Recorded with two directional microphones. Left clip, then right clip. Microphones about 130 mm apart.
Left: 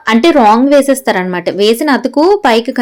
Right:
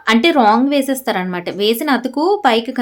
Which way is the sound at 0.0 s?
25° left (ahead or behind).